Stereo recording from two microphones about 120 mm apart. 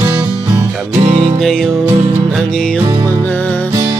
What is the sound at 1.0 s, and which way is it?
Music, 50° right (ahead or behind).